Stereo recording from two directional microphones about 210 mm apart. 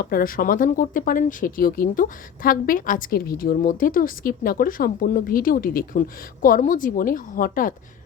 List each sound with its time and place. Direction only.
0.0 s speech: 45° left (ahead or behind)